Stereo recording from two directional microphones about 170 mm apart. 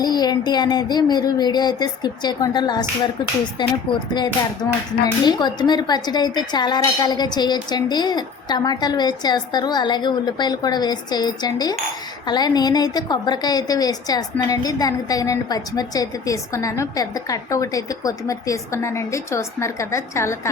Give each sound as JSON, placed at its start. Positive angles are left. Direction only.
{"t": 0.0, "sound": "a woman's voice", "side_deg": 25}